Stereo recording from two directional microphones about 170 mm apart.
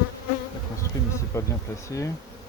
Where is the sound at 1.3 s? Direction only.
20° left (ahead or behind).